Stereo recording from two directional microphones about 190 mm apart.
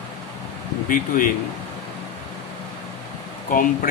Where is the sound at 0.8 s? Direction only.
45° left (ahead or behind).